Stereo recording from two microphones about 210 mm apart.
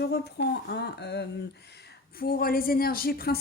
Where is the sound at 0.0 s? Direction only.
55° left (ahead or behind).